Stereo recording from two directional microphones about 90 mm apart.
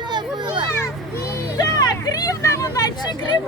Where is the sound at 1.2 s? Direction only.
35° left (ahead or behind).